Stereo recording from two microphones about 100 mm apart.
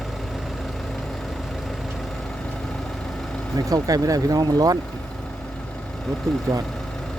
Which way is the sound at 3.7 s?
35° right (ahead or behind).